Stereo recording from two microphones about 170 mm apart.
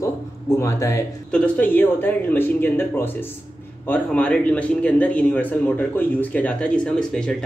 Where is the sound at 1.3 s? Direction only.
10° left (ahead or behind).